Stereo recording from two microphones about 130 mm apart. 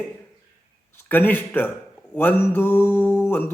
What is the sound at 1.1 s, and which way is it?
Speech, 15° left (ahead or behind).